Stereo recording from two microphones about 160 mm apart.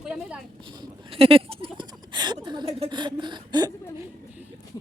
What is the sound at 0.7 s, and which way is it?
Speech, 30° right (ahead or behind).